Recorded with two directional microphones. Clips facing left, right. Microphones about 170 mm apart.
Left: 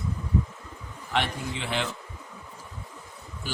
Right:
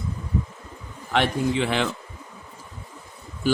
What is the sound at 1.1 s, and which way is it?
Speech, 70° right (ahead or behind).